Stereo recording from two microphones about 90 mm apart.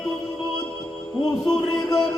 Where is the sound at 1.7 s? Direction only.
45° left (ahead or behind).